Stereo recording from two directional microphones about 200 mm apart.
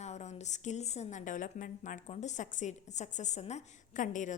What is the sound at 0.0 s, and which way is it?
A woman's voice, 35° left (ahead or behind).